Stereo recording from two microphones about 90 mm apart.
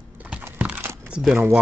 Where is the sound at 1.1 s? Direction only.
5° right (ahead or behind).